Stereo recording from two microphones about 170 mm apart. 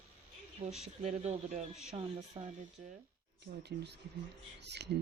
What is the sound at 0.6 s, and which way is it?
Speech, 30° right (ahead or behind).